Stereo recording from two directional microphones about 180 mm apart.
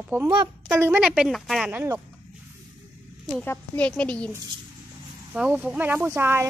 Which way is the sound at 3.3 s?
5° left (ahead or behind).